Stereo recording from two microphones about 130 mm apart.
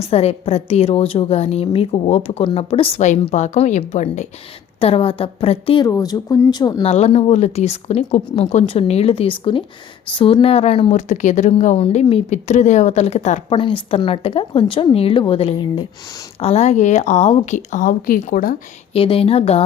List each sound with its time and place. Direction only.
0.0 s speech: 50° left (ahead or behind)
3.0 s speech: 65° left (ahead or behind)
4.8 s speech: 45° left (ahead or behind)
5.8 s speech: 30° left (ahead or behind)
6.8 s speech: 55° left (ahead or behind)
11.1 s speech: 65° left (ahead or behind)
13.5 s speech: 40° left (ahead or behind); by 18.5 s 90° left
18.9 s speech: 45° left (ahead or behind)